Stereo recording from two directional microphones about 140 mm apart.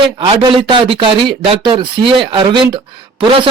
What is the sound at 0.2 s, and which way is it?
Speech, 35° right (ahead or behind).